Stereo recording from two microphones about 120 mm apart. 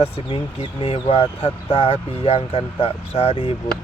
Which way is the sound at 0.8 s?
50° left (ahead or behind).